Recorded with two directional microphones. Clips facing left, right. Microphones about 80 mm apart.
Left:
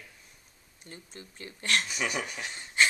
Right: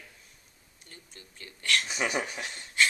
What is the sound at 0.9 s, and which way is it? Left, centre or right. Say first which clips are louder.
Speech: left 6 dB; left.